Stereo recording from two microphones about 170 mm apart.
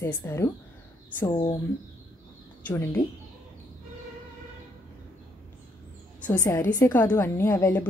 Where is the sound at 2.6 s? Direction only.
15° left (ahead or behind).